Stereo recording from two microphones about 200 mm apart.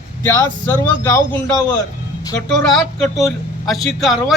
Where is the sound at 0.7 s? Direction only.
10° left (ahead or behind).